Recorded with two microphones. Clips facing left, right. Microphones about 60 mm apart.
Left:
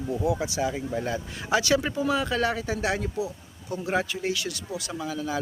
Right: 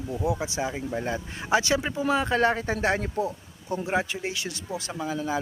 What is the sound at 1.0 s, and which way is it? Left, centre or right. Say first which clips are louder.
Speech: right 1 dB; right.